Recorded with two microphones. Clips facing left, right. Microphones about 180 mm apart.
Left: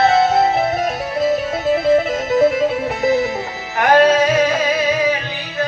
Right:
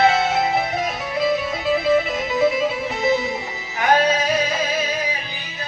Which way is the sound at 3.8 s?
70° left (ahead or behind).